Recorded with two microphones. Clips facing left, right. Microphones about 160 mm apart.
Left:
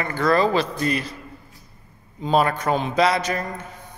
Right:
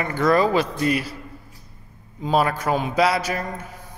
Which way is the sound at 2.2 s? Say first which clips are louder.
Left 1 dB; 5° right (ahead or behind).